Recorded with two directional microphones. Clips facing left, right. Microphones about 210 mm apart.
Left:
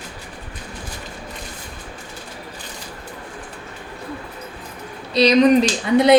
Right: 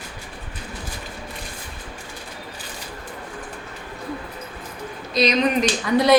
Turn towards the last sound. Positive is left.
turn(degrees=25)  # may be behind; listen again after turning